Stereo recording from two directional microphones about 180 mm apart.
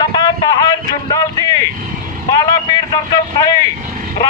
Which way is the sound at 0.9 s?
20° left (ahead or behind).